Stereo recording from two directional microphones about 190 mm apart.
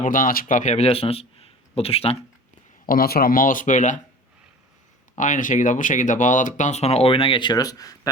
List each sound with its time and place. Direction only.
0.0 s speech: 45° left (ahead or behind)
2.8 s speech: 50° left (ahead or behind)
5.1 s speech: 40° left (ahead or behind); by 8.1 s 20° left (ahead or behind)